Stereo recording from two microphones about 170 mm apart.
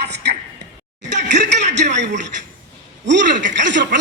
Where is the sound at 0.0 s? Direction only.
80° right.